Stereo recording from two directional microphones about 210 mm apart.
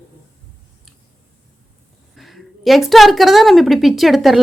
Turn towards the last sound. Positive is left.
turn(degrees=0)  # may be behind; listen again after turning